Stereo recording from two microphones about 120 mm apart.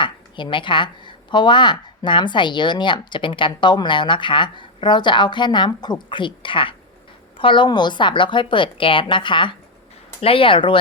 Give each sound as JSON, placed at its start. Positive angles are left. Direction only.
{"t": 0.0, "sound": "a woman's voice", "side_deg": 40}